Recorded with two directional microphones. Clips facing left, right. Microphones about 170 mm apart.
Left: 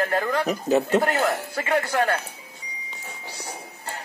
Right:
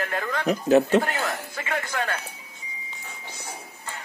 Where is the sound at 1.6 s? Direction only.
40° left (ahead or behind).